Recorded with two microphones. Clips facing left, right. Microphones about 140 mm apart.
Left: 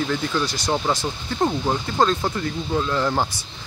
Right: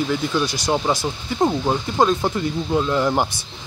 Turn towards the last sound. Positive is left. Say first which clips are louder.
# right 3 dB
turn(degrees=-15)  # may be behind; listen again after turning